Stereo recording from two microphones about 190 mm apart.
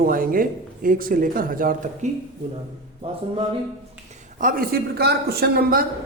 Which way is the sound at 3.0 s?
30° right (ahead or behind).